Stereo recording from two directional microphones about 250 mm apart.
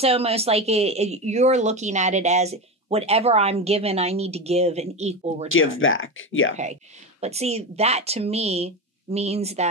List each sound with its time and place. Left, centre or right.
0.0 s speech: right
5.5 s speech: left
6.5 s speech: right